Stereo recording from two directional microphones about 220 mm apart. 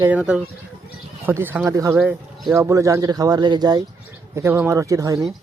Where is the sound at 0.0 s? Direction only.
5° right (ahead or behind).